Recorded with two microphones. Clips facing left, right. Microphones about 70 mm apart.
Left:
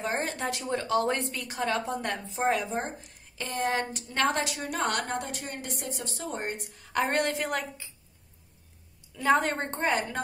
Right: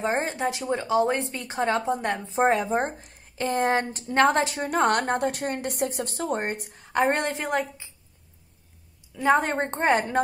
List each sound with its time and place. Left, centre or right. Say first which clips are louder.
0.0 s a woman's voice: right 5 dB; right
2.7 s a woman's voice: right 7 dB; right
6.7 s a woman's voice: right 5 dB; right
9.1 s a woman's voice: right 3 dB; right